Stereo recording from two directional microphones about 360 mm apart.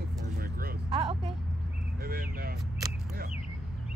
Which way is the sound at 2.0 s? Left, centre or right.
Right.